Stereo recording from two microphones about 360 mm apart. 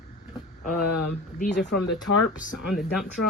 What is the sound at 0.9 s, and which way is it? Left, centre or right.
Speech, left.